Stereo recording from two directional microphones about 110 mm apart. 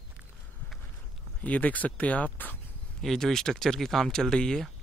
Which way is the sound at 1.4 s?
15° left (ahead or behind).